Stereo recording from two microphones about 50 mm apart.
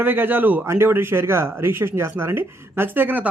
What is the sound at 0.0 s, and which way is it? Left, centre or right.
Speech, right.